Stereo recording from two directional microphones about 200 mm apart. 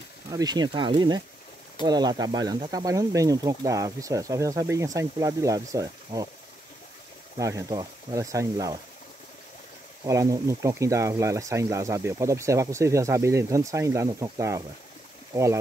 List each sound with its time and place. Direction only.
0.3 s speech: 20° right (ahead or behind)
7.3 s speech: 15° right (ahead or behind)
10.0 s speech: 15° right (ahead or behind)